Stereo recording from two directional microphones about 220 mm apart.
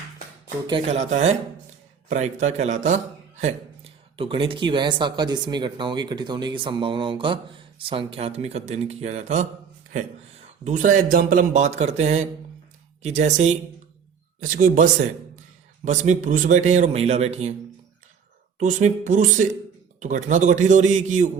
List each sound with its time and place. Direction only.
0.7 s speech: 30° right (ahead or behind)
10.6 s speech: 35° right (ahead or behind)
18.6 s speech: 35° right (ahead or behind)